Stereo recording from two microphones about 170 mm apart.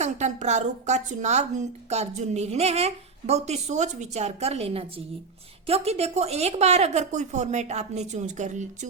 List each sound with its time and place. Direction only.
0.0 s a woman's voice: 45° right (ahead or behind)